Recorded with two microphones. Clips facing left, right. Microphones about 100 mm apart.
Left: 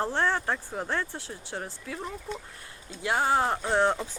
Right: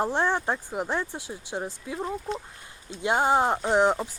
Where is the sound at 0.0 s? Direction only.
15° right (ahead or behind).